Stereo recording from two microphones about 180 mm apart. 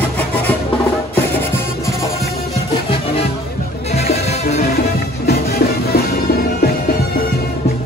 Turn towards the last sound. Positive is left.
turn(degrees=60)  # may be behind; listen again after turning